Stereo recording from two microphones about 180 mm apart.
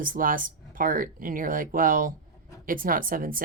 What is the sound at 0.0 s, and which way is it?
Speech, 50° right (ahead or behind).